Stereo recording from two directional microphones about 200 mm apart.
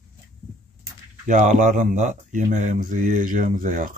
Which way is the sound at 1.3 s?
40° right (ahead or behind).